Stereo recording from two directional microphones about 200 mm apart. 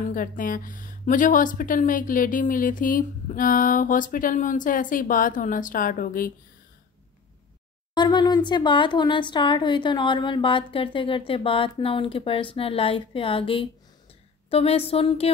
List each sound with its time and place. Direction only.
0.1 s a woman's voice: 45° left (ahead or behind)
7.9 s a woman's voice: 20° left (ahead or behind)